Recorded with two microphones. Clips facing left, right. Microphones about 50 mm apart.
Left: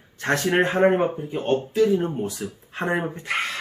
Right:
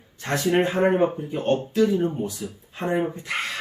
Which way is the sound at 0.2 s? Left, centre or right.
Left.